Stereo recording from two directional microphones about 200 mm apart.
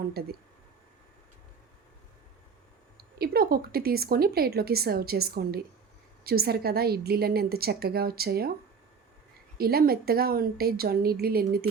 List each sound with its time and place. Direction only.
0.1 s a woman's voice: 50° right (ahead or behind)
3.2 s a woman's voice: 50° right (ahead or behind)
9.6 s a woman's voice: 50° right (ahead or behind)